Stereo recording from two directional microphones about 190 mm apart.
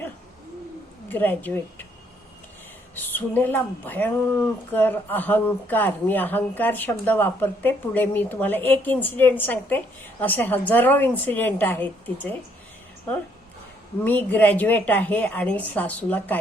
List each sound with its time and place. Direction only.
1.0 s speech: 10° left (ahead or behind)
2.9 s speech: 10° left (ahead or behind)
14.0 s speech: 10° left (ahead or behind)